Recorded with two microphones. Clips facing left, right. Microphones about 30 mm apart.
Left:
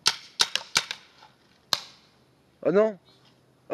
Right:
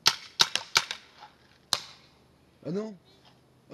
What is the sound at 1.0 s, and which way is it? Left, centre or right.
Cap gun, centre.